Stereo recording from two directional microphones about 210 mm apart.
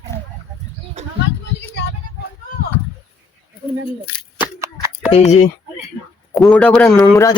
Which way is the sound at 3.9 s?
25° left (ahead or behind).